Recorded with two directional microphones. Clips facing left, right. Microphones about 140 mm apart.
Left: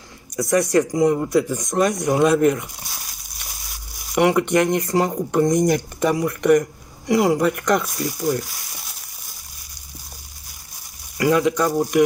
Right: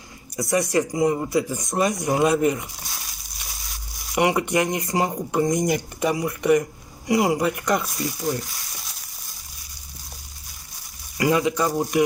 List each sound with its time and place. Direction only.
0.4 s speech: 5° right (ahead or behind)
4.1 s speech: 5° right (ahead or behind)
11.1 s speech: 5° right (ahead or behind)